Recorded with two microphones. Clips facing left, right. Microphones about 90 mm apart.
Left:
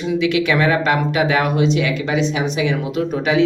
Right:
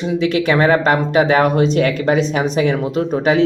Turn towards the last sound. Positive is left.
turn(degrees=-40)  # may be behind; listen again after turning